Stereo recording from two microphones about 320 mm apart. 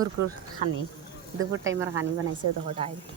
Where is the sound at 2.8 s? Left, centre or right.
Centre.